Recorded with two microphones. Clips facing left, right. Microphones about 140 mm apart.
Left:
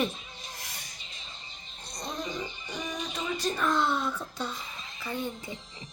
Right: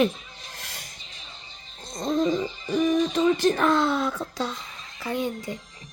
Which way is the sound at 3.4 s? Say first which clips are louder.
Right 7 dB; 90° right.